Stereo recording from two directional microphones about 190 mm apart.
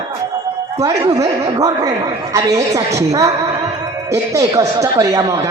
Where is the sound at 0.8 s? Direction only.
15° right (ahead or behind).